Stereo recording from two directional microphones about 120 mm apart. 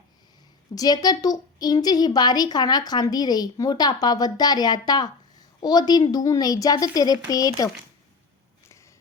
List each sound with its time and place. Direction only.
0.8 s a woman's voice: 35° left (ahead or behind)